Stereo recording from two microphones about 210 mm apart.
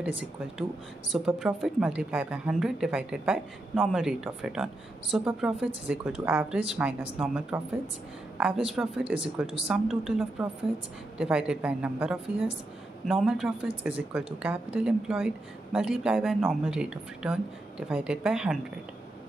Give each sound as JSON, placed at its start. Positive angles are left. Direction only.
{"t": 0.0, "sound": "a woman's voice", "side_deg": -5}